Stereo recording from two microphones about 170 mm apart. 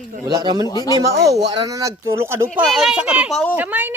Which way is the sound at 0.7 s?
20° left (ahead or behind).